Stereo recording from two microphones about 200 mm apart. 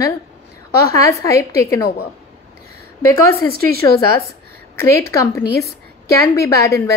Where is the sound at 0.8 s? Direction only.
15° left (ahead or behind).